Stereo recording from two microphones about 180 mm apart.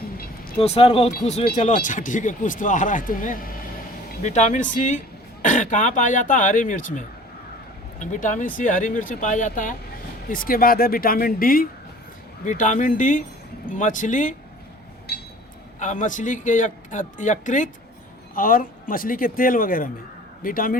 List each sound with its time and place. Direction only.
0.6 s speech: 35° left (ahead or behind)
15.1 s a sound: 65° left (ahead or behind)
15.8 s speech: 45° left (ahead or behind)